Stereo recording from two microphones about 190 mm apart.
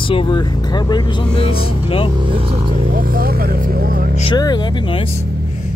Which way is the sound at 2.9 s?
50° right (ahead or behind).